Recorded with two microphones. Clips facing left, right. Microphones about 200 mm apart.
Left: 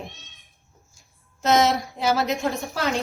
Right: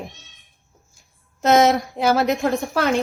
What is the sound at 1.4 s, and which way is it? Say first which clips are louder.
A woman's voice: right 4 dB; 55° right (ahead or behind).